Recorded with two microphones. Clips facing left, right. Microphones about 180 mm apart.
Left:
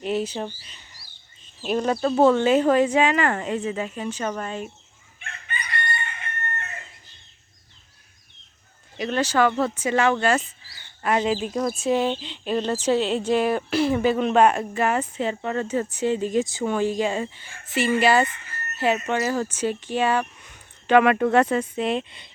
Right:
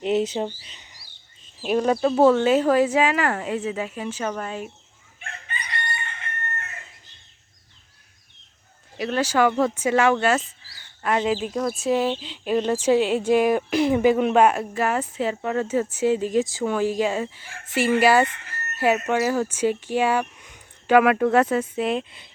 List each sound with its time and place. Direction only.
0.0 s a sound: 20° right (ahead or behind)
0.6 s bird: 20° right (ahead or behind)
1.6 s speech: 5° right (ahead or behind)
5.2 s crowing: 30° right (ahead or behind)
9.0 s speech: 5° right (ahead or behind)
17.4 s speech: 90° right
18.0 s speech: 10° right (ahead or behind)